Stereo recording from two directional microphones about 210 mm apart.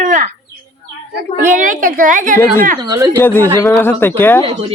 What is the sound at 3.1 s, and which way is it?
Speech, 10° left (ahead or behind).